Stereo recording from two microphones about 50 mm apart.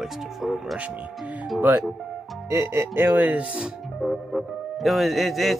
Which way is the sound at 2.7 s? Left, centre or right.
Right.